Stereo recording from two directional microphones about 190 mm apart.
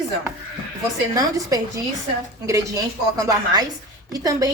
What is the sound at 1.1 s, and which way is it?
Speech, 20° right (ahead or behind).